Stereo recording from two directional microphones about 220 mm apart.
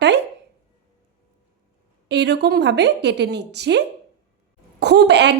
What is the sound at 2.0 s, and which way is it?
Speech, 50° right (ahead or behind).